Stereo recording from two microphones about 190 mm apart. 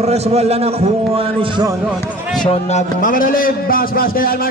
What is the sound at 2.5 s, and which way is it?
A man's voice, 35° left (ahead or behind).